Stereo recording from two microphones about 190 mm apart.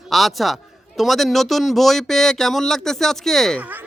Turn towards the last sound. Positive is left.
turn(degrees=0)  # may be behind; listen again after turning